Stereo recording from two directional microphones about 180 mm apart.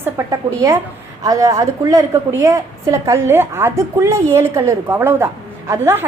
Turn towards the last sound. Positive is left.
turn(degrees=-15)  # may be behind; listen again after turning